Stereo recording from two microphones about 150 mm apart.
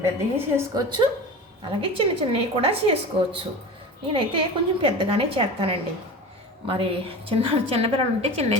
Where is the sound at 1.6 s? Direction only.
35° right (ahead or behind).